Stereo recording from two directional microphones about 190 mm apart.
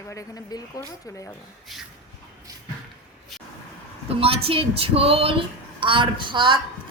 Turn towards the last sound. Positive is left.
turn(degrees=-25)  # may be behind; listen again after turning